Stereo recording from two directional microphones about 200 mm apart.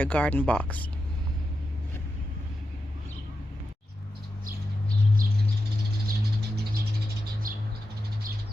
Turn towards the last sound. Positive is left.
turn(degrees=-45)  # may be behind; listen again after turning